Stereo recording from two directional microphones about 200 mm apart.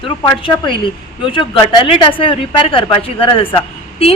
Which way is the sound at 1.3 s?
25° left (ahead or behind).